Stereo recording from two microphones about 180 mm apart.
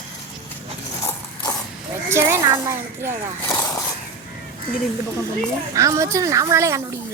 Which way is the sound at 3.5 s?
20° left (ahead or behind).